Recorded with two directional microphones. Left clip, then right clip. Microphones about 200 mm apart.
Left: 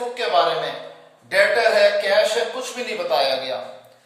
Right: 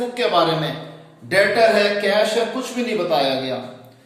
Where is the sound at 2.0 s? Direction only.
Centre (ahead or behind).